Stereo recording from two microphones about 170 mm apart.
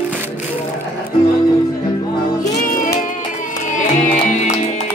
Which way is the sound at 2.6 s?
55° left (ahead or behind).